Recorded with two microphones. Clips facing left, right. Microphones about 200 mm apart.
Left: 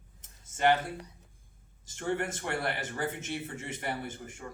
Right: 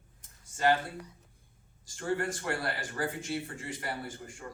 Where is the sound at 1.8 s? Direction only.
20° left (ahead or behind).